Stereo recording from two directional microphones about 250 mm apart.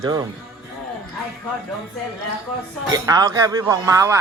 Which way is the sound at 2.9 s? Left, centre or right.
Centre.